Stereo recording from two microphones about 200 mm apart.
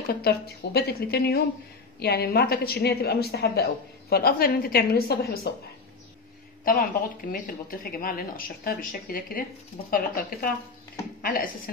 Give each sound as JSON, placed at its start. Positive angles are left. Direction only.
{"t": 0.2, "sound": "a woman's voice", "side_deg": 55}
{"t": 6.6, "sound": "a woman's voice", "side_deg": 45}